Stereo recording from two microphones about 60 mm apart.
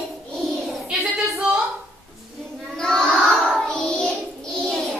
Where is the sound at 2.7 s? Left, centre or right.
Centre.